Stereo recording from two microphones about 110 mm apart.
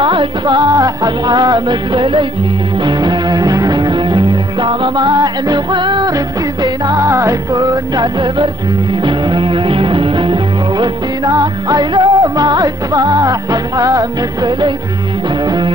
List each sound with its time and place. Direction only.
0.0 s music: 50° right (ahead or behind)